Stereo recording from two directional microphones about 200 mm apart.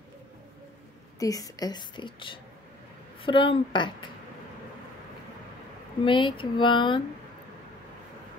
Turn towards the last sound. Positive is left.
turn(degrees=25)  # may be behind; listen again after turning